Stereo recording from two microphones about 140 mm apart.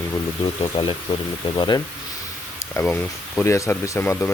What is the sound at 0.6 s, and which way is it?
Speech, 35° left (ahead or behind).